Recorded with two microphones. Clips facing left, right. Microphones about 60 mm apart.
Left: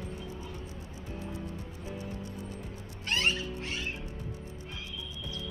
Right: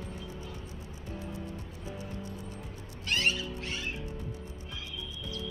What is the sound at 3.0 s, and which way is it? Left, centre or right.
Cat, left.